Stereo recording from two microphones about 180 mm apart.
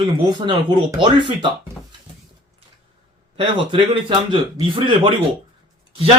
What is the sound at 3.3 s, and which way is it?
Speech, 30° right (ahead or behind).